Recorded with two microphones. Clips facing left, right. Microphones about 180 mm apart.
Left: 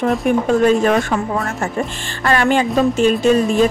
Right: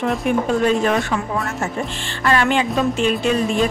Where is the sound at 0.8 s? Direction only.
45° left (ahead or behind).